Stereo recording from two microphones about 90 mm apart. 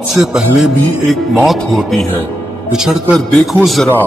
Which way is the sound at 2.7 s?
5° right (ahead or behind).